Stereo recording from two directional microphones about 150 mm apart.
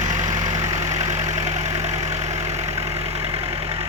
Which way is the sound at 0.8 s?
45° right (ahead or behind).